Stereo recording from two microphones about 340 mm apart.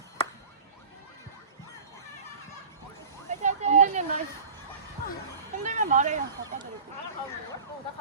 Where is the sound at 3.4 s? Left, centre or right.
Right.